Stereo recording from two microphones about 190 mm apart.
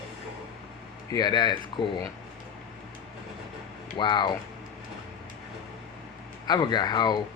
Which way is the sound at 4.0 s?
25° left (ahead or behind).